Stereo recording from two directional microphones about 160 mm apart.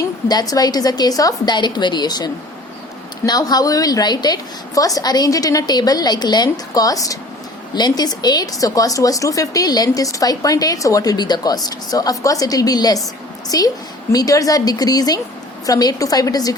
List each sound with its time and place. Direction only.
0.3 s speech: 25° left (ahead or behind)